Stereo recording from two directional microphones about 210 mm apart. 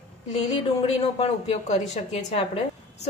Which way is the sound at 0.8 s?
30° left (ahead or behind).